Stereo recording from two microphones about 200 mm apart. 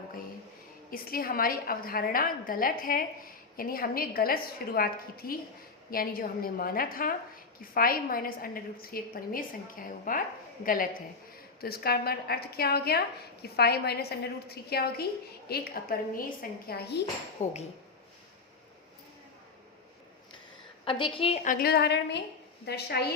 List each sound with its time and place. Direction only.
0.9 s a woman's voice: 45° left (ahead or behind)
17.4 s a woman's voice: 35° left (ahead or behind)
20.8 s a woman's voice: 25° left (ahead or behind); by 23.0 s 55° left (ahead or behind)